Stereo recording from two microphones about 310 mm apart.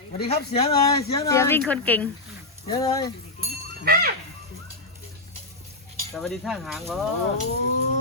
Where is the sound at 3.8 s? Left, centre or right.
Right.